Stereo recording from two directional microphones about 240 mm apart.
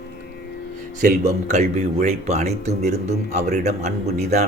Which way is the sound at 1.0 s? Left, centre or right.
Right.